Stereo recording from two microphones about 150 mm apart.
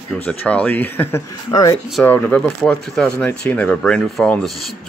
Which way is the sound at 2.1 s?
10° left (ahead or behind).